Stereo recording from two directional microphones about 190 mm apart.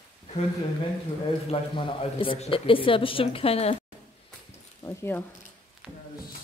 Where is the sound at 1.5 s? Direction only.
25° left (ahead or behind).